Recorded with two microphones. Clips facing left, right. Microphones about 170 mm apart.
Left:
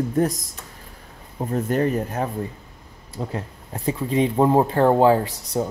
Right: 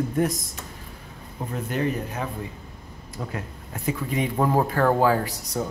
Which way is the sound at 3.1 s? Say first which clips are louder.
Left 4 dB; 30° left (ahead or behind).